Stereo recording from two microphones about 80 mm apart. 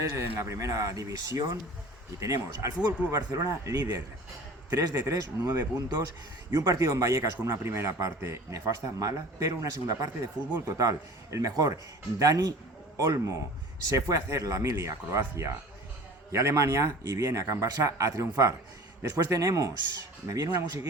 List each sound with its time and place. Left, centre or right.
0.0 s a man's voice: right
6.5 s a man's voice: right